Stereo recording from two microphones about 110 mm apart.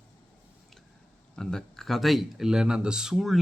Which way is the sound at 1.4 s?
5° left (ahead or behind).